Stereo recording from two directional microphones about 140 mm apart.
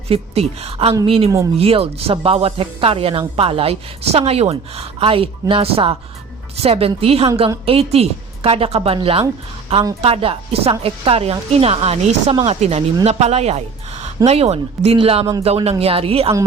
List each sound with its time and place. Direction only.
0.1 s a woman's voice: 45° right (ahead or behind)